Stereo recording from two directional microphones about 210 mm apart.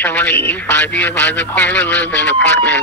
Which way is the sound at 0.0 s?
5° left (ahead or behind).